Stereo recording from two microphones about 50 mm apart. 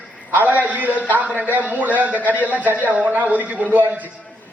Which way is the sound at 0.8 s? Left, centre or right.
Left.